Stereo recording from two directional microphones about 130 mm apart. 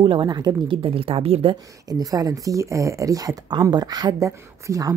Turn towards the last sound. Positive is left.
turn(degrees=-25)  # may be behind; listen again after turning